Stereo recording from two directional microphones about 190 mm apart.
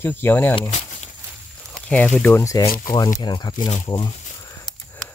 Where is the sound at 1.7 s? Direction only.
5° left (ahead or behind); by 4.1 s 25° left (ahead or behind).